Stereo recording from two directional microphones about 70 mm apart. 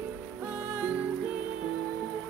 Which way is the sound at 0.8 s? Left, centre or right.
Centre.